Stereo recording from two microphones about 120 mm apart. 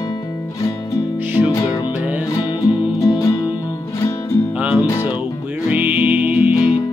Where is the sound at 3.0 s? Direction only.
25° left (ahead or behind).